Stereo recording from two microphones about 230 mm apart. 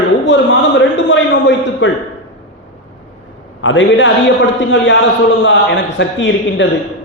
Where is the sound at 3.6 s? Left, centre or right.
Left.